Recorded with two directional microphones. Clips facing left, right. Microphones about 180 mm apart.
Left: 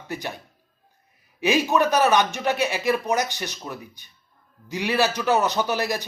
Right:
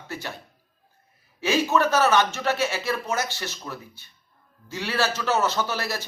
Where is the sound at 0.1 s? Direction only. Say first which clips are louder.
Left 3 dB; 15° left (ahead or behind).